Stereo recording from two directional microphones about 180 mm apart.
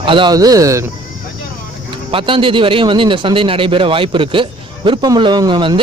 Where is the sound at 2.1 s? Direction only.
30° right (ahead or behind).